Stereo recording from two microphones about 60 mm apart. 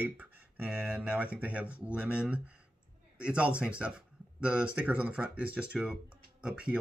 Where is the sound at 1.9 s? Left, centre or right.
Centre.